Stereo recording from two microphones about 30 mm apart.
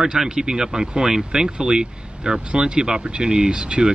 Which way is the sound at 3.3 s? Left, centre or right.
Right.